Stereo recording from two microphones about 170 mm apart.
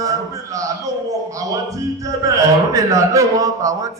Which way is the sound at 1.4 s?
20° right (ahead or behind).